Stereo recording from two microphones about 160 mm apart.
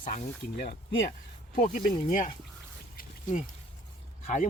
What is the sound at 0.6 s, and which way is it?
Speech, 75° left (ahead or behind).